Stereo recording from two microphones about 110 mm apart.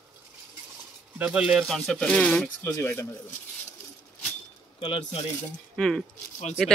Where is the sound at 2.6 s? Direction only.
25° left (ahead or behind).